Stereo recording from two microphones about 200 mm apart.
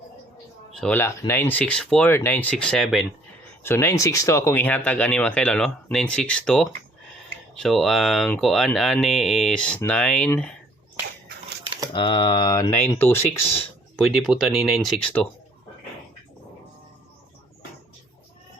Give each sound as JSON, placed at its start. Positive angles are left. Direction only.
{"t": 0.8, "sound": "speech", "side_deg": 10}
{"t": 3.6, "sound": "speech", "side_deg": 10}
{"t": 11.9, "sound": "speech", "side_deg": 25}
{"t": 13.9, "sound": "speech", "side_deg": 0}